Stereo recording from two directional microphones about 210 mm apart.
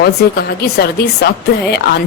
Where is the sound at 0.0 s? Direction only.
50° left (ahead or behind).